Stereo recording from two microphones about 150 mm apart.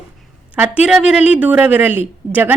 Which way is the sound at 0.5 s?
10° right (ahead or behind).